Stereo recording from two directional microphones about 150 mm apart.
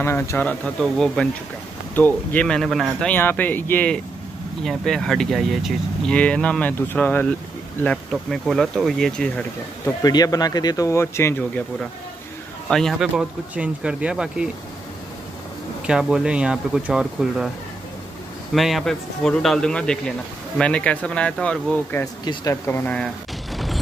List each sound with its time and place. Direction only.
0.0 s speech: 15° left (ahead or behind); by 3.1 s centre (ahead or behind)
3.1 s speech: 10° left (ahead or behind)
10.0 s speech: 25° left (ahead or behind)
12.6 s speech: 5° left (ahead or behind)
13.1 s speech: 5° right (ahead or behind)
15.9 s speech: 5° right (ahead or behind)
18.5 s speech: centre (ahead or behind)
22.2 s speech: 25° left (ahead or behind); by 23.8 s centre (ahead or behind)